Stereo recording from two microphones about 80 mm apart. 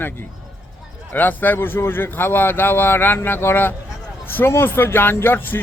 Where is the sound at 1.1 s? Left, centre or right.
Left.